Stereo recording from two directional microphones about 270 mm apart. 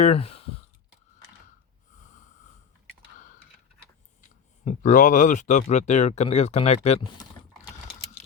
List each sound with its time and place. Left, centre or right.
0.0 s speech: left
4.6 s speech: left